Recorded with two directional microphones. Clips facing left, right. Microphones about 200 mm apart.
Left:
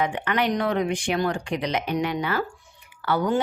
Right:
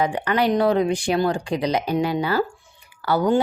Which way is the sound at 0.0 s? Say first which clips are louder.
Right 3 dB; 35° right (ahead or behind).